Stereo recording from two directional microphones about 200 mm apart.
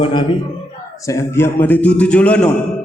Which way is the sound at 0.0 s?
25° left (ahead or behind).